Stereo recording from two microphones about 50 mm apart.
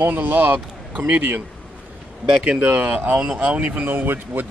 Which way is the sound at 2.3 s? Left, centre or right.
Right.